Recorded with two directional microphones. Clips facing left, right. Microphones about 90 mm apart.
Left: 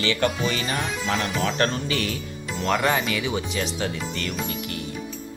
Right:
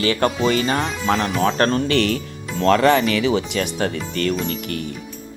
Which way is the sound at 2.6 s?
90° right.